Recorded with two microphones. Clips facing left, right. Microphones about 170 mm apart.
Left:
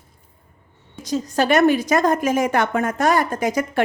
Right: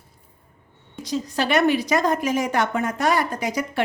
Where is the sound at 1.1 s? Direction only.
45° left (ahead or behind).